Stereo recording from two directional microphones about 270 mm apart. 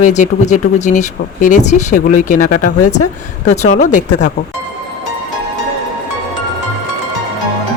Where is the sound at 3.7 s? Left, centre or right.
Left.